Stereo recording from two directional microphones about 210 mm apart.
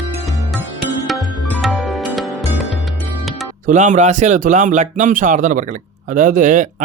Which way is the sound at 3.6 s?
35° right (ahead or behind).